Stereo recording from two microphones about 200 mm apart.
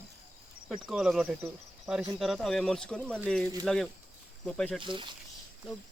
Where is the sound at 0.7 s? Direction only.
5° right (ahead or behind).